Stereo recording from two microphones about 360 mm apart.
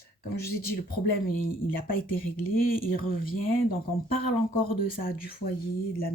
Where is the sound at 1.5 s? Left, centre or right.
Left.